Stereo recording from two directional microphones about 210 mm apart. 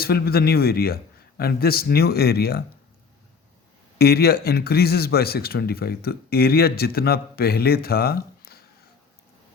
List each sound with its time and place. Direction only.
0.0 s speech: 45° left (ahead or behind)
3.9 s speech: 50° left (ahead or behind)